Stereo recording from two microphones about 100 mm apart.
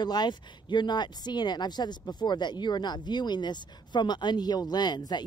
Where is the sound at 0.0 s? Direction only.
45° left (ahead or behind).